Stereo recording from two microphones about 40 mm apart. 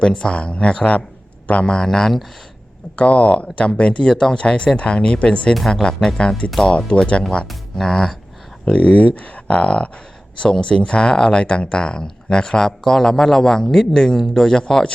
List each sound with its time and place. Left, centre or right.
0.0 s speech: left
1.6 s a man's voice: centre
2.9 s speech: left
5.5 s speech: centre
6.1 s speech: left
7.8 s a man's voice: centre
8.6 s a man's voice: left; by 14.9 s centre